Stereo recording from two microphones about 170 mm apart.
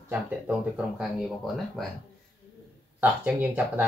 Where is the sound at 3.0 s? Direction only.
10° right (ahead or behind).